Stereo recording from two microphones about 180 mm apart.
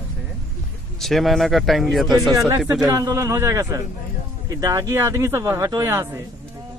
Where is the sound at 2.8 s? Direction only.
15° right (ahead or behind).